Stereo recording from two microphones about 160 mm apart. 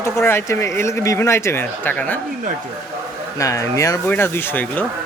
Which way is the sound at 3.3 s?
20° left (ahead or behind).